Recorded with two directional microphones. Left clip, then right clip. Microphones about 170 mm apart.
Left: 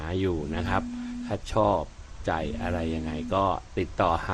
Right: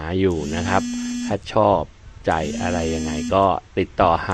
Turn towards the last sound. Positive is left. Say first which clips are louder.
# right 8 dB
turn(degrees=-20)  # may be behind; listen again after turning